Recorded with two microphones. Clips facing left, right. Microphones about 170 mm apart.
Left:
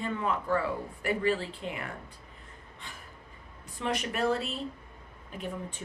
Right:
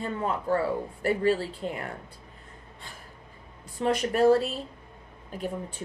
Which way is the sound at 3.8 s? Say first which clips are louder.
Right 8 dB; 35° right (ahead or behind).